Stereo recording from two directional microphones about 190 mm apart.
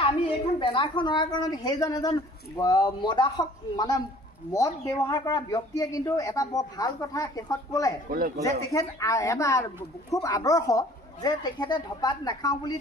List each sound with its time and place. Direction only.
0.6 s a man's voice: 25° left (ahead or behind)